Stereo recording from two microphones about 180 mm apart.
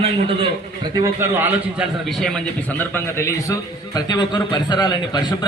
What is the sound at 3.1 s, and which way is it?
A man's voice, 15° left (ahead or behind).